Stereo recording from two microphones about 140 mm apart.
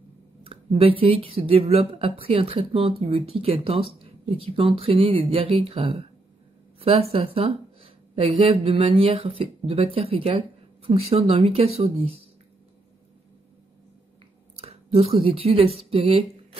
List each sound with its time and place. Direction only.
0.5 s speech: 45° right (ahead or behind)
14.6 s speech: 45° right (ahead or behind)